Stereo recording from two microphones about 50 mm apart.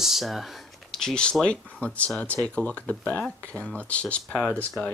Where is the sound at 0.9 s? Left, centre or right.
Centre.